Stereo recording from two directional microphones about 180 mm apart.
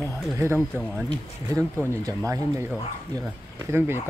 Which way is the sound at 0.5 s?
5° left (ahead or behind).